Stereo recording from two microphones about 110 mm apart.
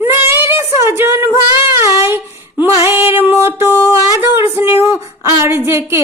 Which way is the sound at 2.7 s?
25° right (ahead or behind).